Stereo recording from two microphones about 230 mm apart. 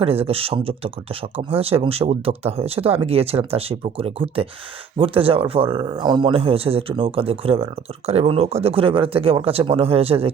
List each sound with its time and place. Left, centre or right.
0.0 s speech: right